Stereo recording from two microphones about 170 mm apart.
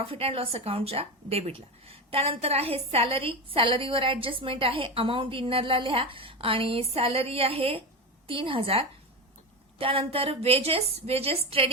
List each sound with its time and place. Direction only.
0.0 s speech: 35° right (ahead or behind)